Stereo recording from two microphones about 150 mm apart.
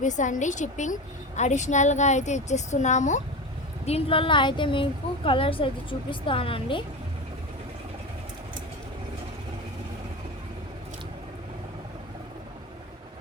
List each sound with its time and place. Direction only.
0.0 s a woman's voice: 55° left (ahead or behind)
3.8 s a woman's voice: 40° left (ahead or behind)